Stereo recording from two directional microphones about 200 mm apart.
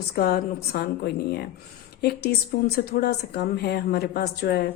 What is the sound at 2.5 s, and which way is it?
A woman's voice, 50° left (ahead or behind).